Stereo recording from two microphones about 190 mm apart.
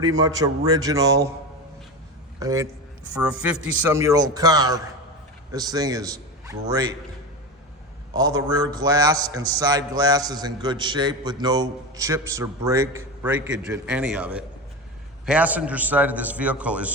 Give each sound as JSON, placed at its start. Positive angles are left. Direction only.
{"t": 0.0, "sound": "a man's voice", "side_deg": -20}
{"t": 2.4, "sound": "a man's voice", "side_deg": -15}
{"t": 3.2, "sound": "a man's voice", "side_deg": -5}
{"t": 8.1, "sound": "a man's voice", "side_deg": -20}